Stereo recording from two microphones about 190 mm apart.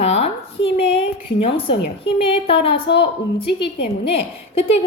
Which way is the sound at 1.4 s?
30° left (ahead or behind).